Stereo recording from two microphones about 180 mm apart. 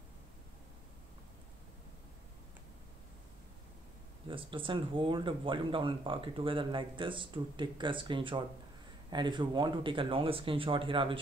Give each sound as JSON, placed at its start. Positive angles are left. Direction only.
{"t": 4.3, "sound": "speech", "side_deg": -30}